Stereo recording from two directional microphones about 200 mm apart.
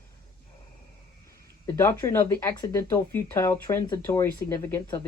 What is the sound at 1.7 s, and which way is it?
Speech, 10° left (ahead or behind).